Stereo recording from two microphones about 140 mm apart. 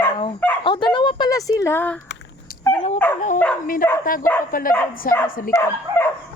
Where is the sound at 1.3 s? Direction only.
25° left (ahead or behind).